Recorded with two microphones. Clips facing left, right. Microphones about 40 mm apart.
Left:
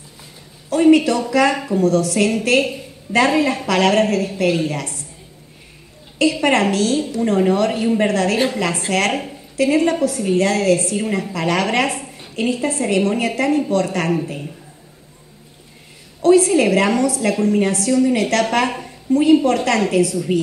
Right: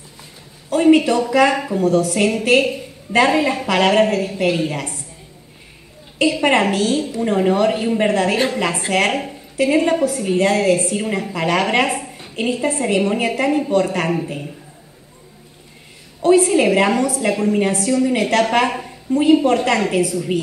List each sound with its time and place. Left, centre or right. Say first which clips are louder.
0.7 s a woman's voice: even; centre
2.1 s a woman's voice: right 1 dB; centre
6.4 s a woman's voice: right 1 dB; centre
16.2 s a woman's voice: left 1 dB; centre
18.1 s a woman's voice: right 1 dB; centre
18.5 s a woman's voice: right 1 dB; centre